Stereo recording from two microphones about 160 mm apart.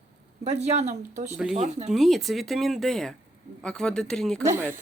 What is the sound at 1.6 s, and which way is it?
Speech, 45° right (ahead or behind).